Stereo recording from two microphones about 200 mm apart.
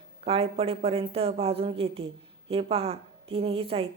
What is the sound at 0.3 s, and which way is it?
A woman's voice, 30° right (ahead or behind).